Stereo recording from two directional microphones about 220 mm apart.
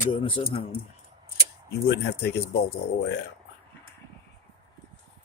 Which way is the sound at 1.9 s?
50° left (ahead or behind).